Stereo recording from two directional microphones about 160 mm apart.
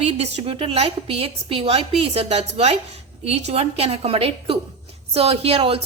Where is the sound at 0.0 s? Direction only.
40° right (ahead or behind).